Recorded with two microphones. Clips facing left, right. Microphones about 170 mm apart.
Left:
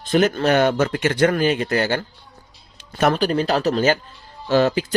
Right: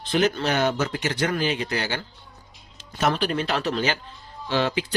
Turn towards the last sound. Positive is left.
turn(degrees=45)  # may be behind; listen again after turning